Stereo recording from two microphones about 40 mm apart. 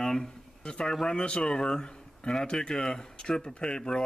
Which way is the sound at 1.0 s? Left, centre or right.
Left.